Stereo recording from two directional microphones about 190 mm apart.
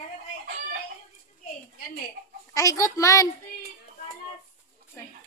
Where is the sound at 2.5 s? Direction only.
15° left (ahead or behind).